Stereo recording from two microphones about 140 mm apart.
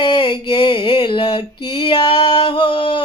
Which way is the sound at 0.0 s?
35° left (ahead or behind).